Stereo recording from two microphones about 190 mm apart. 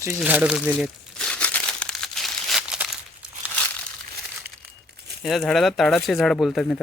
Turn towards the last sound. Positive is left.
turn(degrees=5)  # may be behind; listen again after turning